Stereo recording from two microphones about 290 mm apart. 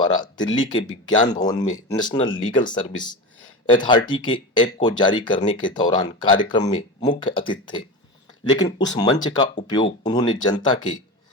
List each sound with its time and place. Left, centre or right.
0.0 s speech: centre